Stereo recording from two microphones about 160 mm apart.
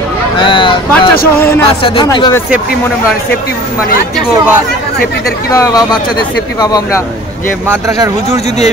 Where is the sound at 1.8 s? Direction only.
30° left (ahead or behind).